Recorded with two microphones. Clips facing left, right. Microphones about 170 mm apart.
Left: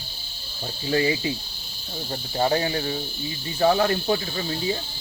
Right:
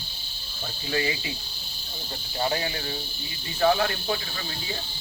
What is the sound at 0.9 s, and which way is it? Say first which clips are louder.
Cricket: left 6 dB; 35° left (ahead or behind).